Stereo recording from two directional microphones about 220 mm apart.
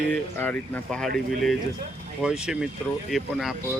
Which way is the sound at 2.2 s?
5° right (ahead or behind).